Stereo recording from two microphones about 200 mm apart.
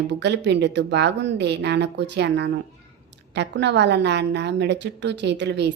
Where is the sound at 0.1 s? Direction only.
60° right (ahead or behind).